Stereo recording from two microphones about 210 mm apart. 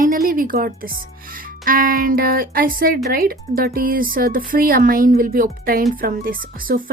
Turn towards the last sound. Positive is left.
turn(degrees=-40)  # may be behind; listen again after turning